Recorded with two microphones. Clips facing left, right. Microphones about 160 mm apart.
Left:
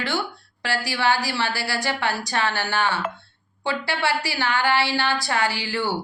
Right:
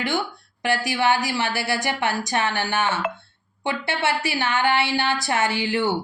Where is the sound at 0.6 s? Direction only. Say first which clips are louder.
Right 2 dB; 20° right (ahead or behind).